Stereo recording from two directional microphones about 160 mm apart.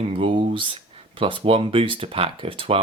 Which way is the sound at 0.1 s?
35° right (ahead or behind).